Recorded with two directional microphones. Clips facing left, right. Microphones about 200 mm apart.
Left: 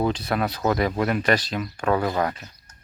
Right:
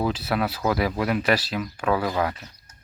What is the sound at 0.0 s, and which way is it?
Speech, 5° right (ahead or behind).